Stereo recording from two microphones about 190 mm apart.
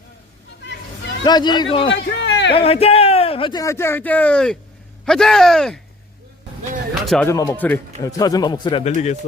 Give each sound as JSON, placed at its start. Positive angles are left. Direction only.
{"t": 1.2, "sound": "speech", "side_deg": 20}
{"t": 2.0, "sound": "a sound", "side_deg": 70}
{"t": 2.6, "sound": "a man's voice", "side_deg": 30}
{"t": 6.9, "sound": "speech", "side_deg": 0}
{"t": 7.3, "sound": "speech", "side_deg": 10}
{"t": 8.2, "sound": "speech", "side_deg": 20}